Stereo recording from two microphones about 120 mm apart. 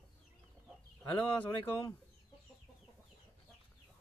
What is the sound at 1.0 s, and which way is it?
Speech, 15° left (ahead or behind).